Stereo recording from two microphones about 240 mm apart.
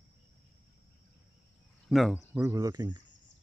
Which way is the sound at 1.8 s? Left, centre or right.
Centre.